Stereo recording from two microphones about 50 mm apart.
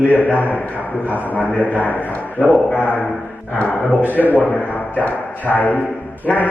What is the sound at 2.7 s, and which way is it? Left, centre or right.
Speech, left.